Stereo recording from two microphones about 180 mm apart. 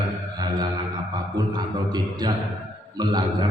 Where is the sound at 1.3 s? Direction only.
25° right (ahead or behind).